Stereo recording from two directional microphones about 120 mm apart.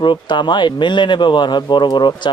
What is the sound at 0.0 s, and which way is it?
Speech, 40° left (ahead or behind).